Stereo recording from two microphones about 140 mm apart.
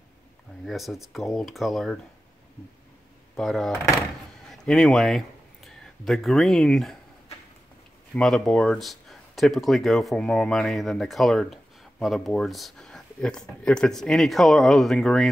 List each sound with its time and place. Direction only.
0.7 s speech: centre (ahead or behind)
3.3 s speech: centre (ahead or behind)
8.1 s speech: 5° left (ahead or behind)